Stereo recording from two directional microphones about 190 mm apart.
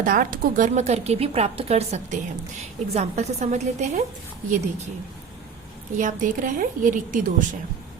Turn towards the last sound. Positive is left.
turn(degrees=-45)  # may be behind; listen again after turning